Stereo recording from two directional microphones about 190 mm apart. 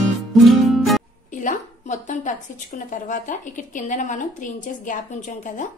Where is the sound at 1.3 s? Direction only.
40° left (ahead or behind).